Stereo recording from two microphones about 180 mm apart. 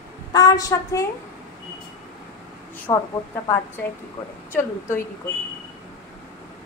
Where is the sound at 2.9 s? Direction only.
20° left (ahead or behind).